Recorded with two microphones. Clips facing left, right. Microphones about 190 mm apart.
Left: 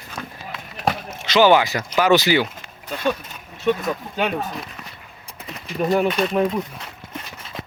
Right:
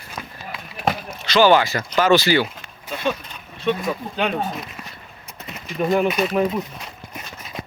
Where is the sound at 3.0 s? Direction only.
5° left (ahead or behind).